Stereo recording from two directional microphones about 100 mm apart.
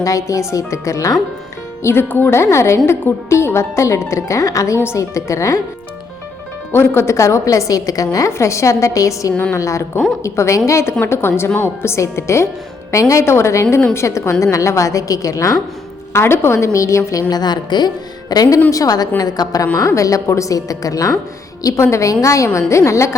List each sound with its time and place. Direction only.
0.0 s a woman's voice: 30° left (ahead or behind)
6.7 s a woman's voice: 25° left (ahead or behind)
9.3 s a woman's voice: 15° left (ahead or behind)
9.6 s a woman's voice: 30° left (ahead or behind)